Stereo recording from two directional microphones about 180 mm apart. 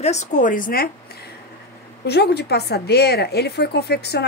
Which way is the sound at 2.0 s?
65° left (ahead or behind).